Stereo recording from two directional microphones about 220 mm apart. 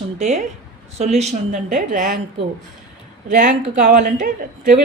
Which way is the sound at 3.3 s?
35° right (ahead or behind).